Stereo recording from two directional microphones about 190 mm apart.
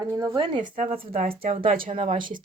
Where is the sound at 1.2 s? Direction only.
40° right (ahead or behind).